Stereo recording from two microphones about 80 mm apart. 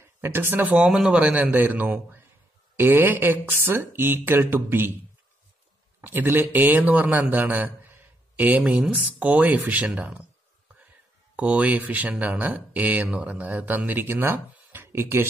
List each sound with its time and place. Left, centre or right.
0.0 s speech: right
0.7 s speech: centre
1.2 s speech: right
6.0 s a man's voice: right
11.3 s speech: centre